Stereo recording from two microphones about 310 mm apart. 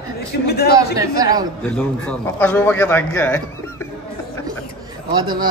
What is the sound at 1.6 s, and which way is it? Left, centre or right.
A man's voice, centre.